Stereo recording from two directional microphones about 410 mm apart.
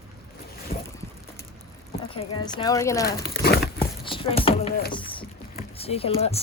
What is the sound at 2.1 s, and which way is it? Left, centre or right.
Speech, centre.